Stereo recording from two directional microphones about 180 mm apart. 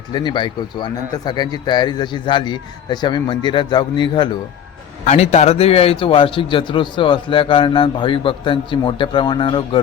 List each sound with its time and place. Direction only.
0.1 s a man's voice: 25° left (ahead or behind)
5.0 s a man's voice: 35° left (ahead or behind)